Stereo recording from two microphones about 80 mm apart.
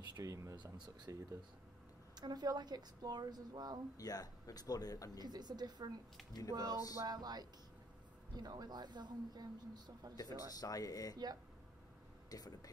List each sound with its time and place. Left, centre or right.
0.1 s speech: right
2.1 s speech: right
3.9 s speech: left
5.2 s speech: right
10.1 s speech: left
12.3 s speech: left